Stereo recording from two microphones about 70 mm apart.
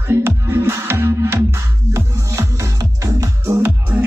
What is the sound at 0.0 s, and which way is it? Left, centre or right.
Music, right.